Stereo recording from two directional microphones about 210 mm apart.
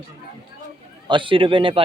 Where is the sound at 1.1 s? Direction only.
25° right (ahead or behind).